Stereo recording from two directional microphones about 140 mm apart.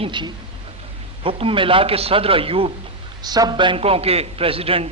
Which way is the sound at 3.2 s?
30° right (ahead or behind).